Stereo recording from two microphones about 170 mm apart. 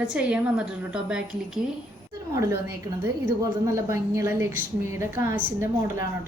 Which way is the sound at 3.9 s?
15° right (ahead or behind).